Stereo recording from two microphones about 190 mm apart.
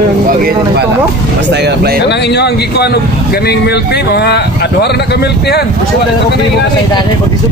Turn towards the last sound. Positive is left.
turn(degrees=60)  # may be behind; listen again after turning